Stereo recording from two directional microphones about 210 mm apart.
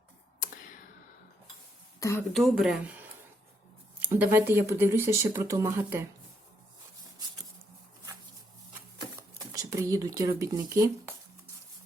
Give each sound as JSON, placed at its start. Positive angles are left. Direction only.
{"t": 2.0, "sound": "a woman's voice", "side_deg": 15}
{"t": 2.3, "sound": "speech", "side_deg": 0}
{"t": 4.0, "sound": "speech", "side_deg": -10}
{"t": 9.6, "sound": "speech", "side_deg": -15}